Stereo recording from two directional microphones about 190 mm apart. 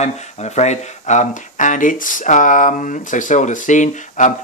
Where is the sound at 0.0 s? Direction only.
35° left (ahead or behind).